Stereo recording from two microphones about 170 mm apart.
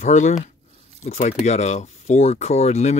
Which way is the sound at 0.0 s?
45° left (ahead or behind).